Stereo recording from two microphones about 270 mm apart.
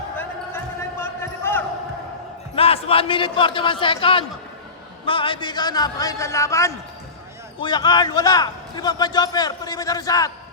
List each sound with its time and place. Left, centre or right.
0.2 s basketball bounce: centre
2.6 s a man's voice: left